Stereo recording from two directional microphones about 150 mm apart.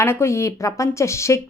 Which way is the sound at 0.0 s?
20° left (ahead or behind).